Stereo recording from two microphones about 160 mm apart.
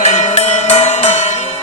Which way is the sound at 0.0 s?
45° left (ahead or behind).